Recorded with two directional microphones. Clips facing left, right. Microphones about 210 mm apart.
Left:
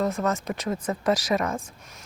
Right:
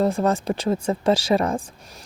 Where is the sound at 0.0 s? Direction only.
30° right (ahead or behind).